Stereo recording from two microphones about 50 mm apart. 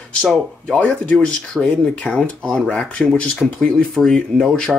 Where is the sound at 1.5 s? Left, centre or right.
Centre.